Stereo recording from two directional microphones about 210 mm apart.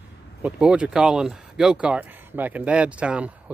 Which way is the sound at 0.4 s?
5° right (ahead or behind).